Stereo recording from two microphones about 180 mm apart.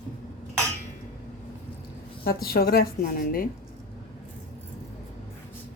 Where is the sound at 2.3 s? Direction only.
55° left (ahead or behind).